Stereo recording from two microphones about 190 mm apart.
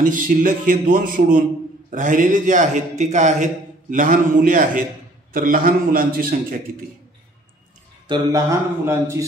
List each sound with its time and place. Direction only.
0.0 s a man's voice: 45° right (ahead or behind)
8.1 s speech: 15° right (ahead or behind)